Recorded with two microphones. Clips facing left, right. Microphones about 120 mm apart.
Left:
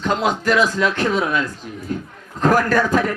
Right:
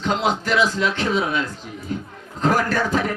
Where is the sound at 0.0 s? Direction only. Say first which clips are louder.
Left 2 dB; 50° left (ahead or behind).